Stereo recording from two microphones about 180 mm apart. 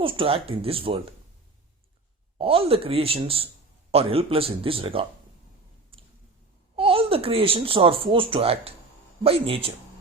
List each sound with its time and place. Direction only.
0.0 s speech: 30° right (ahead or behind)
2.4 s speech: 30° right (ahead or behind)
6.7 s speech: 30° right (ahead or behind)